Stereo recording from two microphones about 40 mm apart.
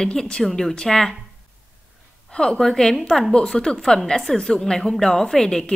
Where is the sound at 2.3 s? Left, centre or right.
Centre.